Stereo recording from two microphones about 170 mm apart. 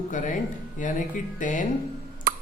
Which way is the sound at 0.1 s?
50° left (ahead or behind).